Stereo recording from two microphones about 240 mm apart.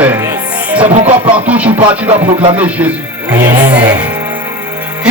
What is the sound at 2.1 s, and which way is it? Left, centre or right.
Music, right.